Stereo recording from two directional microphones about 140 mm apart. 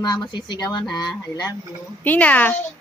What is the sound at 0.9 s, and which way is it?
Speech, 30° left (ahead or behind).